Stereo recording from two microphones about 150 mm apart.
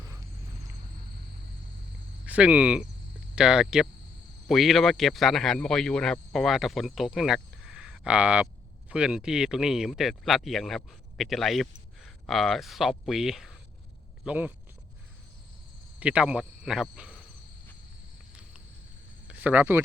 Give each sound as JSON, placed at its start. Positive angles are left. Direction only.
{"t": 0.0, "sound": "a sound", "side_deg": -20}
{"t": 2.2, "sound": "speech", "side_deg": -10}
{"t": 16.0, "sound": "speech", "side_deg": -10}
{"t": 19.3, "sound": "speech", "side_deg": -10}